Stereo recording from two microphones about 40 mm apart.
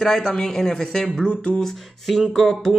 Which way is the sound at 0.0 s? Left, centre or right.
Centre.